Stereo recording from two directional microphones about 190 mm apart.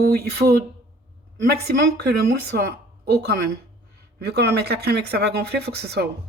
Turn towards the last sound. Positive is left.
turn(degrees=-60)  # may be behind; listen again after turning